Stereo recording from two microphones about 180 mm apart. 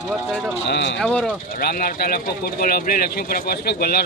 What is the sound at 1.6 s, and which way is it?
Speech, 55° left (ahead or behind).